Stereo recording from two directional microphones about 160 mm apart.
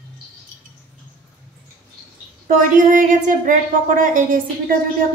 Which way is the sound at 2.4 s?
55° right (ahead or behind).